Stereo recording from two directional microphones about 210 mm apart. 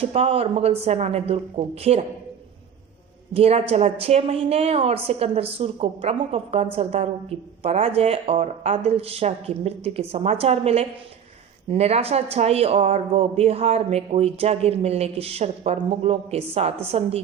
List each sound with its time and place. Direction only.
0.0 s speech: 30° right (ahead or behind)
3.3 s speech: 30° right (ahead or behind)